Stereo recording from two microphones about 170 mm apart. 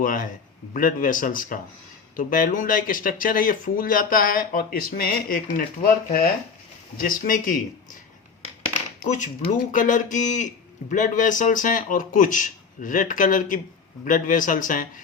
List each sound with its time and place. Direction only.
0.0 s a man's voice: 55° left (ahead or behind)
9.0 s a man's voice: 45° left (ahead or behind)